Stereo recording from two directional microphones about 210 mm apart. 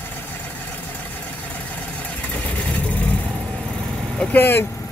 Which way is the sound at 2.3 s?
5° left (ahead or behind).